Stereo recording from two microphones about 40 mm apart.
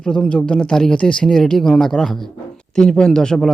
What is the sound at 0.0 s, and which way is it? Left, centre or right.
A man's voice, left.